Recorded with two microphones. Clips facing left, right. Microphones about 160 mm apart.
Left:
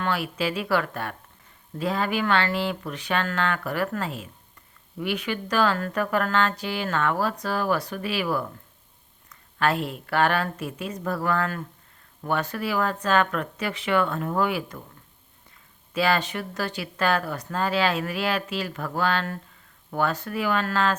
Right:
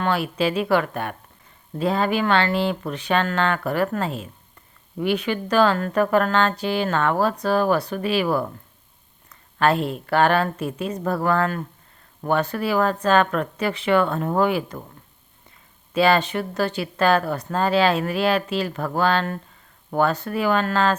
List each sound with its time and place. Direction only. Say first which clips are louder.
0.0 s speech: right 5 dB; 30° right (ahead or behind)
9.6 s speech: right 5 dB; 30° right (ahead or behind)
15.9 s speech: right 5 dB; 30° right (ahead or behind)